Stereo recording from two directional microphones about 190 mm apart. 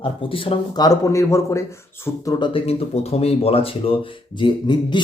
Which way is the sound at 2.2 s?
25° left (ahead or behind).